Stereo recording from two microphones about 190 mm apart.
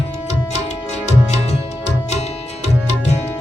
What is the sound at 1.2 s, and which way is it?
Music, 35° left (ahead or behind).